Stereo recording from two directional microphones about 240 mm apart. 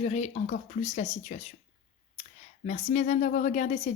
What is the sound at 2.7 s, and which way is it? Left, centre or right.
Speech, left.